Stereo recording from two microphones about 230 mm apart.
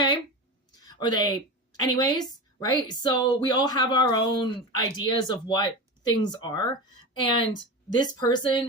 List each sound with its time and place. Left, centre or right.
0.8 s a woman's voice: centre